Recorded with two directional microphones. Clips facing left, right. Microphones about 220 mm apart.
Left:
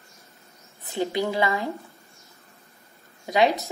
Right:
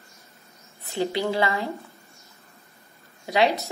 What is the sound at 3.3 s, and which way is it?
Speech, 15° left (ahead or behind).